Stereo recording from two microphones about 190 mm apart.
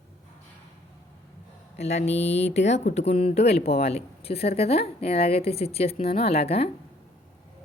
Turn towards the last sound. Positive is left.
turn(degrees=35)  # may be behind; listen again after turning